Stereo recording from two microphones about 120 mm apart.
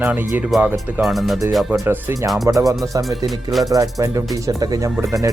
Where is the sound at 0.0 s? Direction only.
15° right (ahead or behind).